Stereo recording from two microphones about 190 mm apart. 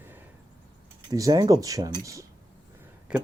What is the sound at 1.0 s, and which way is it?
Speech, 20° right (ahead or behind).